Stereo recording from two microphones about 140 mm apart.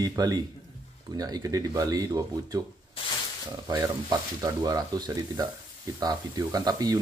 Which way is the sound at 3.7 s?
25° right (ahead or behind).